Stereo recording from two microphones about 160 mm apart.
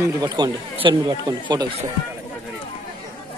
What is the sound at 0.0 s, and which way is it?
Speech, 25° right (ahead or behind).